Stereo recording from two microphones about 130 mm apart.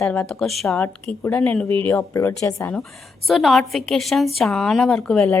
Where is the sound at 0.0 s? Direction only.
5° left (ahead or behind).